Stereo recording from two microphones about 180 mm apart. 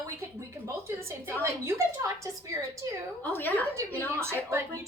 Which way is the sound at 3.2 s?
10° left (ahead or behind).